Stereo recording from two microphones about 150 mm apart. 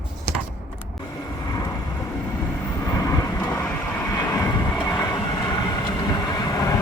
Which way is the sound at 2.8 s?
25° left (ahead or behind).